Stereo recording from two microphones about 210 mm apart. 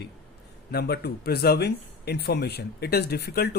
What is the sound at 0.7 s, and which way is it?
Speech, 50° left (ahead or behind).